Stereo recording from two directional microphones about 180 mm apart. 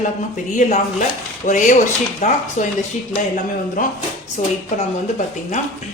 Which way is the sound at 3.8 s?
50° left (ahead or behind).